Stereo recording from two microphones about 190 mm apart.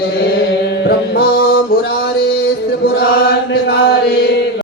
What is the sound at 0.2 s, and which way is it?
Music, 55° left (ahead or behind).